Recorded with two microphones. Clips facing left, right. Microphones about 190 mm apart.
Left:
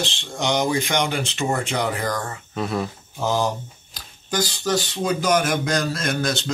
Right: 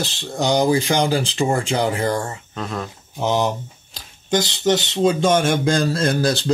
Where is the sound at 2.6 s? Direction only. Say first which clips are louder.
Left 3 dB; 5° left (ahead or behind).